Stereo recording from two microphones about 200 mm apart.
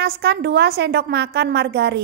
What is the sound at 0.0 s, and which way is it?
A woman's voice, 55° right (ahead or behind).